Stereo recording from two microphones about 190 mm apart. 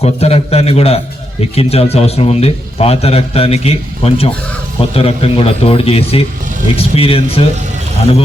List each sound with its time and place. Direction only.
0.0 s a man's voice: 35° left (ahead or behind)